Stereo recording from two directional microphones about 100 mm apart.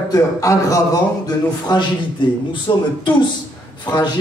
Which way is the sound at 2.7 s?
45° left (ahead or behind).